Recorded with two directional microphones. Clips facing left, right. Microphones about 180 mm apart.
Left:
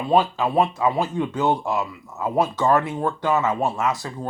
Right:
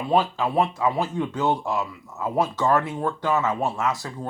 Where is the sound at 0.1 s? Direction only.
20° left (ahead or behind).